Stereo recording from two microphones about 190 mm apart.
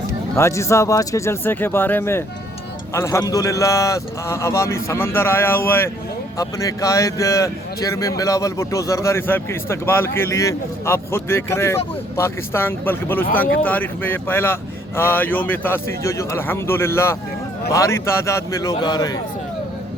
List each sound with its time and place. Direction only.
0.3 s a man's voice: 15° left (ahead or behind)